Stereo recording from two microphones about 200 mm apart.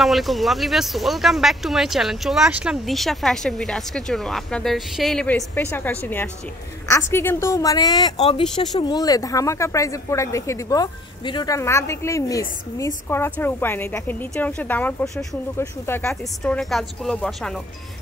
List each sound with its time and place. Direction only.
0.0 s speech: centre (ahead or behind)